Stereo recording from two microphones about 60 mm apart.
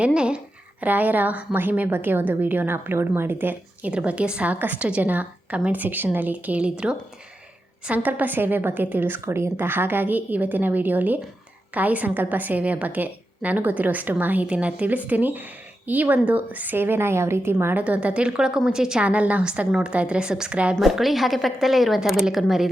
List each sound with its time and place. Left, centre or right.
0.0 s a sound: centre
0.9 s a woman's voice: right
9.2 s speech: right
9.6 s a woman's voice: right
17.8 s speech: right
19.0 s a woman's voice: right
20.7 s a woman's voice: centre